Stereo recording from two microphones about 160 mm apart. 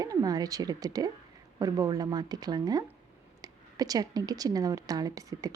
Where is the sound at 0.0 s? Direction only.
25° right (ahead or behind).